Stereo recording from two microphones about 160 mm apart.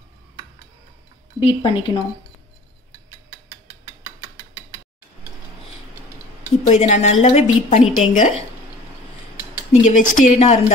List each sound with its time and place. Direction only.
1.4 s speech: 35° left (ahead or behind)
6.6 s a woman's voice: 50° left (ahead or behind)
9.7 s a woman's voice: 55° left (ahead or behind)